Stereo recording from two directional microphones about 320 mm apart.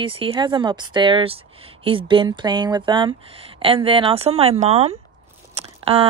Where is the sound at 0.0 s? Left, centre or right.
Centre.